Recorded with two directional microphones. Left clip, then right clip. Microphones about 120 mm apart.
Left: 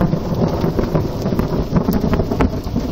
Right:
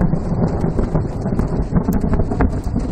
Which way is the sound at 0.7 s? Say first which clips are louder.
Left 3 dB; 20° left (ahead or behind).